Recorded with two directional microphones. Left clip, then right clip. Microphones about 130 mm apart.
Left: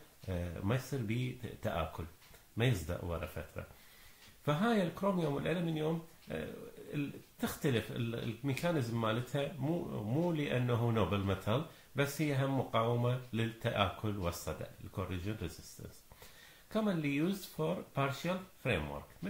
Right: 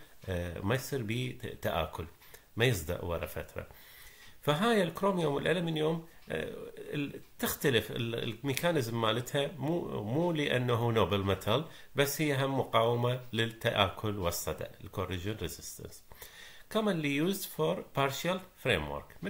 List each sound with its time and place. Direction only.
0.3 s speech: 15° right (ahead or behind)
16.7 s speech: 15° right (ahead or behind)